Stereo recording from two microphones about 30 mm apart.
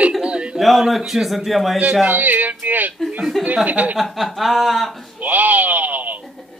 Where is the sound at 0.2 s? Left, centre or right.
Right.